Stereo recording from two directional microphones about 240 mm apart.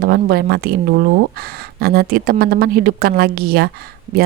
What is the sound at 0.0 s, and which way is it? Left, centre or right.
A woman's voice, right.